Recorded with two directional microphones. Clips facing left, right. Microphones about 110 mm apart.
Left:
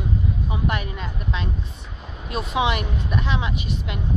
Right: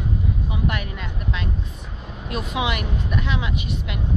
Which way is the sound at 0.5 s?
30° left (ahead or behind).